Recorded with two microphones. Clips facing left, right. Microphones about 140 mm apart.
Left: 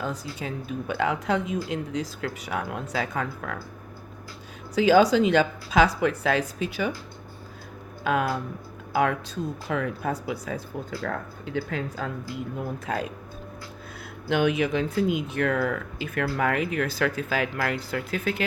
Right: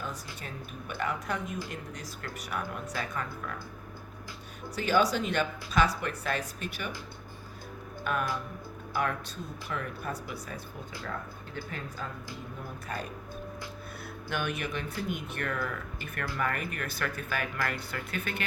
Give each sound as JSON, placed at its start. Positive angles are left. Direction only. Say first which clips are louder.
{"t": 0.0, "sound": "speech", "louder": "left 8 dB", "side_deg": 90}
{"t": 4.8, "sound": "speech", "louder": "left 9 dB", "side_deg": 90}
{"t": 8.0, "sound": "speech", "louder": "left 7 dB", "side_deg": 90}
{"t": 11.0, "sound": "speech", "louder": "left 7 dB", "side_deg": 75}
{"t": 12.5, "sound": "speech", "louder": "left 8 dB", "side_deg": 90}
{"t": 14.3, "sound": "speech", "louder": "left 11 dB", "side_deg": 90}